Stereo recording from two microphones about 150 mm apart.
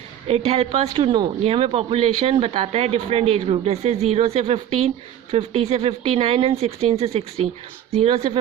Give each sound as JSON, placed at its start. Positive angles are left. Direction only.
{"t": 0.3, "sound": "speech", "side_deg": -45}